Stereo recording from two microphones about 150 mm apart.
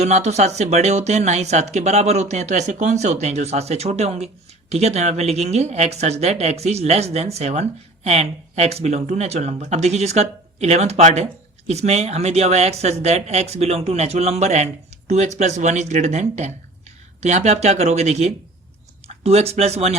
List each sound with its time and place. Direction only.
0.0 s speech: 50° right (ahead or behind)